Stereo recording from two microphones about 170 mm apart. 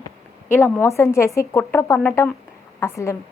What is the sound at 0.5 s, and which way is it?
A woman's voice, 15° left (ahead or behind).